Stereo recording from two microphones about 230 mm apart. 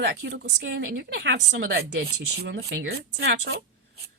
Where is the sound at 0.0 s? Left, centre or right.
Right.